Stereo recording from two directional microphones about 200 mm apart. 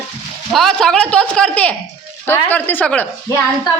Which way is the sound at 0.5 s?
Centre (ahead or behind).